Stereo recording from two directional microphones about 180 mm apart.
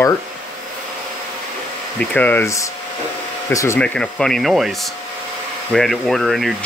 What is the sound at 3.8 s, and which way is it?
Speech, 5° left (ahead or behind).